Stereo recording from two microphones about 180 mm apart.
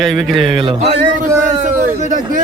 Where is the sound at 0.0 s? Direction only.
Centre (ahead or behind).